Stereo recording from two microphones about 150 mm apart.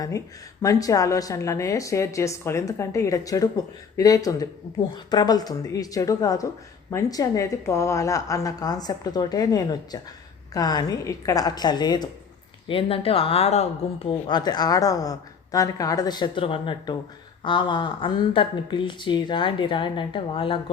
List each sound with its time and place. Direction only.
0.6 s a woman's voice: 25° left (ahead or behind); by 14.1 s 45° left (ahead or behind)
14.1 s a woman's voice: 30° left (ahead or behind)